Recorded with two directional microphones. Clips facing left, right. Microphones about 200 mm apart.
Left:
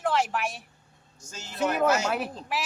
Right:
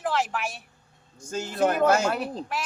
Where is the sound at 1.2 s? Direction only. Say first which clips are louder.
Right 5 dB; 55° right (ahead or behind).